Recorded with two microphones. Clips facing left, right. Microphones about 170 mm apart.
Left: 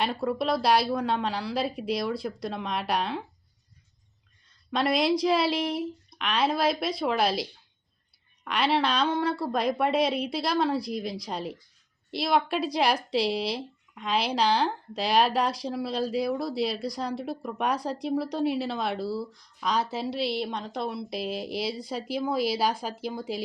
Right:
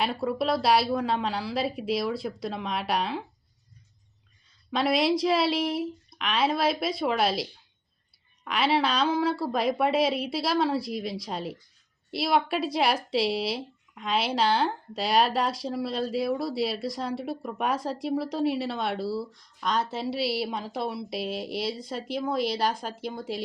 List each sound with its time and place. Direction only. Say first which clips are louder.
0.0 s speech: even; centre (ahead or behind)
4.4 s speech: even; centre (ahead or behind)
8.4 s speech: even; centre (ahead or behind)